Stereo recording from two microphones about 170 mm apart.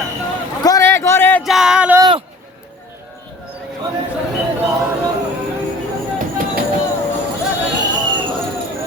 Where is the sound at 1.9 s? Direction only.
25° right (ahead or behind).